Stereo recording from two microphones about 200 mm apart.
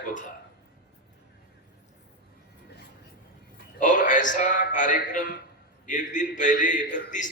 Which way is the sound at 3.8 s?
40° left (ahead or behind).